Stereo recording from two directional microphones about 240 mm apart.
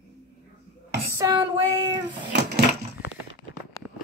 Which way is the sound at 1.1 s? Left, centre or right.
Centre.